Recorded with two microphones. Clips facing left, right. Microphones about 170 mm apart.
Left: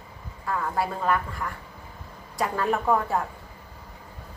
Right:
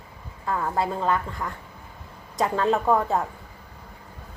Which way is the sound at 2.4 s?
20° right (ahead or behind).